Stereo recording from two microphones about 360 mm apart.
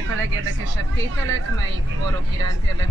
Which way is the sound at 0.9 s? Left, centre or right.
Right.